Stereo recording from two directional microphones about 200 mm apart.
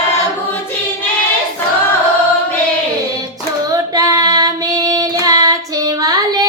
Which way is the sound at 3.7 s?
20° right (ahead or behind).